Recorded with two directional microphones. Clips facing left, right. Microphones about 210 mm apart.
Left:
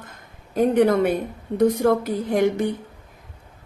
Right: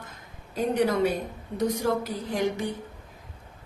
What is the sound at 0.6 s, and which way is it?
A woman's voice, 55° left (ahead or behind).